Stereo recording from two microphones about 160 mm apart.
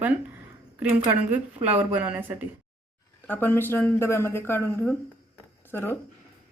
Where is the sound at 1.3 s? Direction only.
10° right (ahead or behind).